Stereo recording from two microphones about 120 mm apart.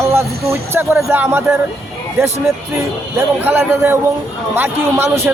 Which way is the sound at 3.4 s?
15° right (ahead or behind).